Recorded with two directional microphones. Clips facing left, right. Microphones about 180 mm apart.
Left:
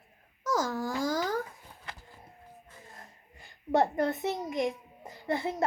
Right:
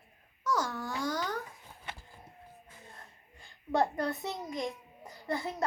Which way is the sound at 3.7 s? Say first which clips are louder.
Left 4 dB; 20° left (ahead or behind).